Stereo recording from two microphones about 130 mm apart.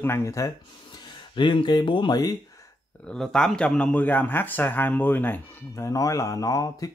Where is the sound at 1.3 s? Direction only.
40° left (ahead or behind).